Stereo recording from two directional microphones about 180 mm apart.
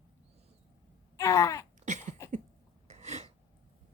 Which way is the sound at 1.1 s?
15° left (ahead or behind).